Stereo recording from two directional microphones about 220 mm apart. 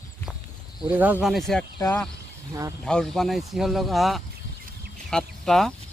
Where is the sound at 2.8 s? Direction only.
Centre (ahead or behind).